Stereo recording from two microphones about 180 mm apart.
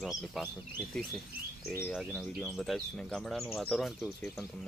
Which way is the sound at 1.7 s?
10° left (ahead or behind).